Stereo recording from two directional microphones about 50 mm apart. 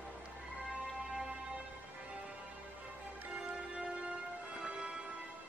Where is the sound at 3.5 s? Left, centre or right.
Centre.